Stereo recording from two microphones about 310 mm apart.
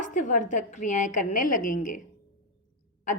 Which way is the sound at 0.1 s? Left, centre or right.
Left.